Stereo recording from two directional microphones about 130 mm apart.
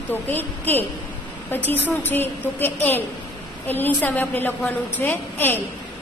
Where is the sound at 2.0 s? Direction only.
15° left (ahead or behind).